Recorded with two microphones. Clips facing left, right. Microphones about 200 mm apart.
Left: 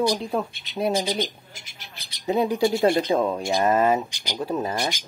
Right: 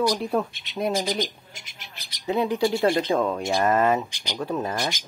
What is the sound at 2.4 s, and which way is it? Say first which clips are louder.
Speech: left 1 dB; 15° left (ahead or behind).